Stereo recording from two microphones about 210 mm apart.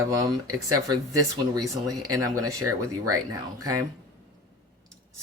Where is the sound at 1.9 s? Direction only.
90° right.